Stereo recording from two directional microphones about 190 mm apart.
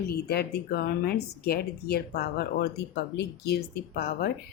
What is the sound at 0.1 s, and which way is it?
Speech, 55° left (ahead or behind).